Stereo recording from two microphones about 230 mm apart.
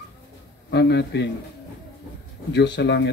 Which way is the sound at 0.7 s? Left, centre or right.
Left.